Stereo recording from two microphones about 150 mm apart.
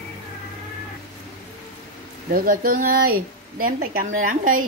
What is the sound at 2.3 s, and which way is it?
Speech, 75° right (ahead or behind).